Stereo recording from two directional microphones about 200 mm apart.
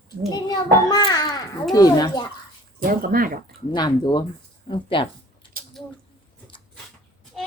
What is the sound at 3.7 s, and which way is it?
A child's voice, 20° left (ahead or behind).